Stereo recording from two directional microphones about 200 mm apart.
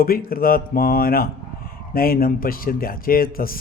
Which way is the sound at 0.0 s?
45° left (ahead or behind).